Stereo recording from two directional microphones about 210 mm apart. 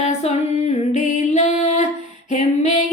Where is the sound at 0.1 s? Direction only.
30° left (ahead or behind).